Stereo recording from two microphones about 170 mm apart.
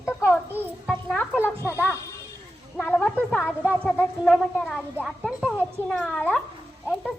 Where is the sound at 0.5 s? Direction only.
10° right (ahead or behind).